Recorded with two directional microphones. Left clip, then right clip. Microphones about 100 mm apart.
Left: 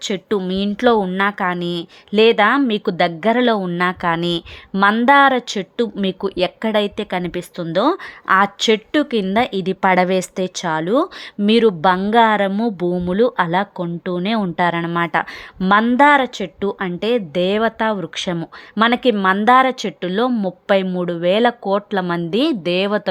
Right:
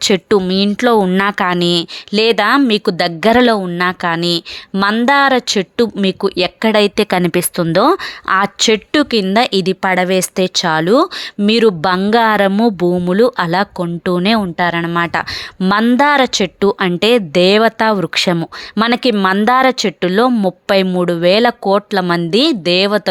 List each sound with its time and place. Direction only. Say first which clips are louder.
0.0 s speech: right 9 dB; 45° right (ahead or behind)
0.4 s speech: right 3 dB; 25° right (ahead or behind)
1.1 s a woman's voice: right 4 dB; 40° right (ahead or behind)
3.6 s speech: right 3 dB; 10° right (ahead or behind)
5.3 s a woman's voice: right 6 dB; 30° right (ahead or behind)
6.9 s speech: right 9 dB; 45° right (ahead or behind)
8.3 s a woman's voice: right 2 dB; 30° right (ahead or behind)
9.8 s speech: left 2 dB; 5° left (ahead or behind)
10.3 s speech: right 7 dB; 25° right (ahead or behind)
14.4 s a woman's voice: right 3 dB; 5° right (ahead or behind); by 18.3 s 40° right (ahead or behind)
18.3 s speech: right 2 dB; 25° right (ahead or behind)